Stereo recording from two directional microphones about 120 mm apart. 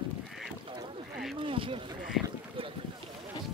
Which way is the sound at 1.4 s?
45° right (ahead or behind).